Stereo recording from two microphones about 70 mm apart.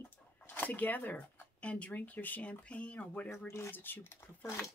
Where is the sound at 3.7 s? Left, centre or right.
Left.